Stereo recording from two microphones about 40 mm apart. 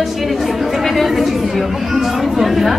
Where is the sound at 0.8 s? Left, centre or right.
Centre.